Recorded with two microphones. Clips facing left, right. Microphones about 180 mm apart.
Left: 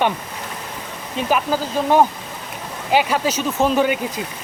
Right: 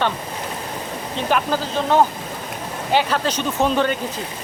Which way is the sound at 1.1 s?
5° left (ahead or behind).